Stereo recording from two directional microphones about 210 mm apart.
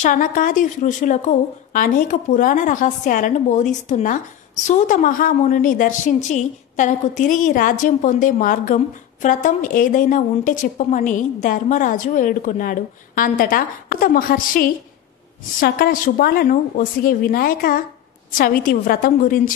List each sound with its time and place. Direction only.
0.0 s a woman's voice: 40° left (ahead or behind)